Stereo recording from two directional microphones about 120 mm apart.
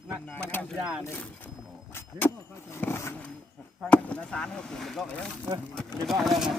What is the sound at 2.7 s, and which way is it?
Vehicle, 20° left (ahead or behind).